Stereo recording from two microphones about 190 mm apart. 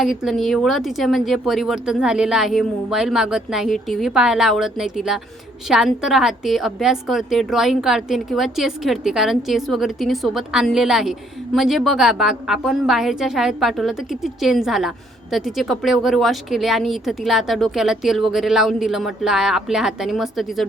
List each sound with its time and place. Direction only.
0.0 s a woman's voice: centre (ahead or behind)